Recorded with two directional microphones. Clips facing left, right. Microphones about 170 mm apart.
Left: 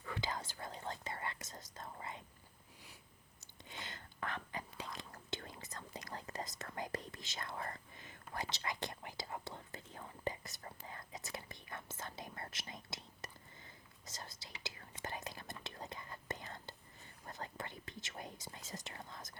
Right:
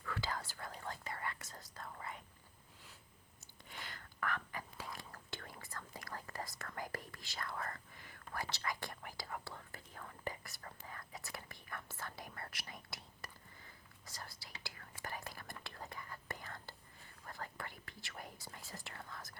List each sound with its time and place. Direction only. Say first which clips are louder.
0.0 s whispering: even; 20° left (ahead or behind)
3.6 s whispering: left 1 dB; 20° left (ahead or behind)
17.2 s speech: left 1 dB; 20° left (ahead or behind)